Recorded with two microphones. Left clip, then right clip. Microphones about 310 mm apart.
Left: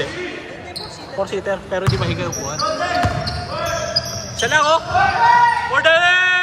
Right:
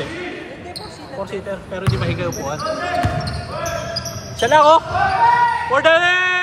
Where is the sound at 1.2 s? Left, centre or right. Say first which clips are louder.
Left 5 dB; left.